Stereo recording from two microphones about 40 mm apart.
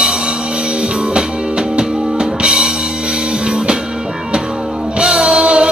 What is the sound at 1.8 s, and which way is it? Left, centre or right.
Drum kit, centre.